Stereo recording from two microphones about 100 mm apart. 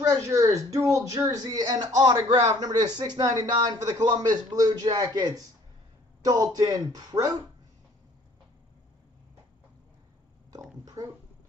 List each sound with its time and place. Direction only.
0.0 s speech: 30° right (ahead or behind)
11.0 s speech: 35° right (ahead or behind)